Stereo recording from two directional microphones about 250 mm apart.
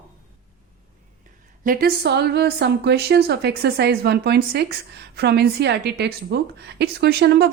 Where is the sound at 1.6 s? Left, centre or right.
Right.